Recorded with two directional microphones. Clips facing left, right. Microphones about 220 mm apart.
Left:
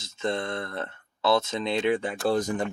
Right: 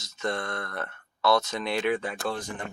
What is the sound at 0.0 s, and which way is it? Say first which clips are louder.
Speech: left 2 dB; 25° left (ahead or behind).